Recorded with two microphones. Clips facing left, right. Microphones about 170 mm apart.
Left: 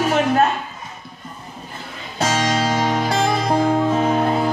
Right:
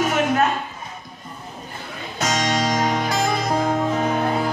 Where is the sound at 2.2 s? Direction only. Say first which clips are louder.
Left 2 dB; 30° left (ahead or behind).